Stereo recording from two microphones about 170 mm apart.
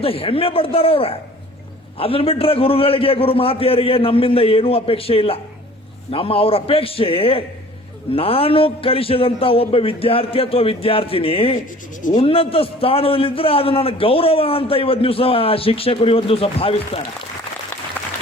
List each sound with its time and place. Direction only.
0.0 s a man's voice: 35° left (ahead or behind)